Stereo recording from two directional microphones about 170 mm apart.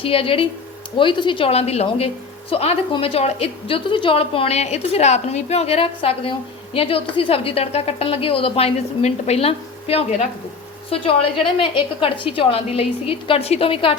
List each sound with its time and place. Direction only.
0.0 s a woman's voice: 35° left (ahead or behind)